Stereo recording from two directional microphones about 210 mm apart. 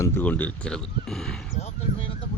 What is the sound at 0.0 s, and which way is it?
Speech, 10° left (ahead or behind).